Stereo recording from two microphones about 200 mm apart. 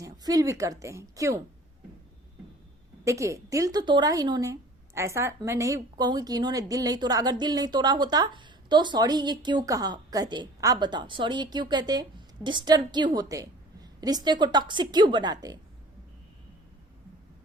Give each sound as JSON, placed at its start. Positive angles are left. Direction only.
{"t": 0.0, "sound": "a woman's voice", "side_deg": -20}
{"t": 3.0, "sound": "a woman's voice", "side_deg": -15}